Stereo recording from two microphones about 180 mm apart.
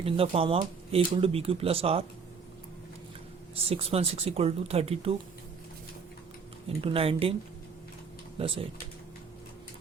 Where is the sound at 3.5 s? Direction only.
35° right (ahead or behind).